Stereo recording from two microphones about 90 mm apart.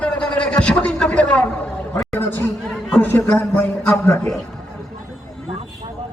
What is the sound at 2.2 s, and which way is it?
A man's voice, 25° left (ahead or behind).